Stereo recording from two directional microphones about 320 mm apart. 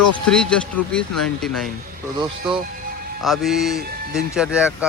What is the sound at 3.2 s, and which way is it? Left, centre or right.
Speech, centre.